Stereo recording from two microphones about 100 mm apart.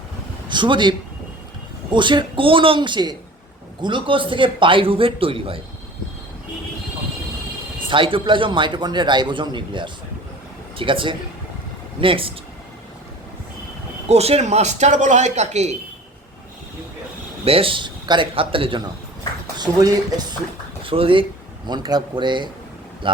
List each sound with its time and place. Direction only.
0.4 s a man's voice: 50° right (ahead or behind)
7.9 s a man's voice: 60° right (ahead or behind)
14.1 s speech: 90° right
17.4 s a man's voice: 70° right (ahead or behind)
19.5 s speech: 40° right (ahead or behind)
20.8 s a man's voice: 65° right (ahead or behind)
21.7 s a man's voice: 45° right (ahead or behind)